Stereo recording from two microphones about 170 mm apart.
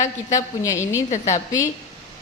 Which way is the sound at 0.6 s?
15° left (ahead or behind).